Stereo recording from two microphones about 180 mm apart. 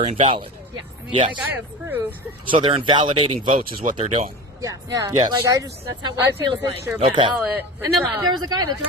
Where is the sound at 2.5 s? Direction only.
30° right (ahead or behind).